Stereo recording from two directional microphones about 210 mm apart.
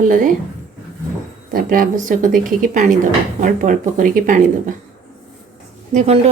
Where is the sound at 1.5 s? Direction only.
40° right (ahead or behind).